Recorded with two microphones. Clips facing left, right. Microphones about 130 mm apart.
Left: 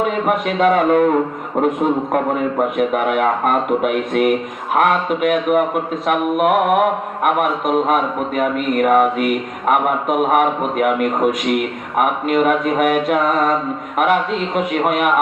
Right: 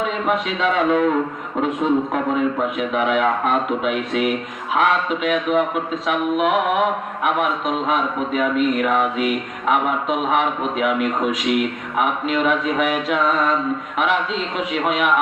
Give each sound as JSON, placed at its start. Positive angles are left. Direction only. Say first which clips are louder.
{"t": 0.0, "sound": "a man's voice", "louder": "left 3 dB", "side_deg": 50}